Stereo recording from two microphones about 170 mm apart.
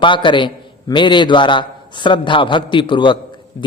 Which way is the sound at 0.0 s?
30° left (ahead or behind).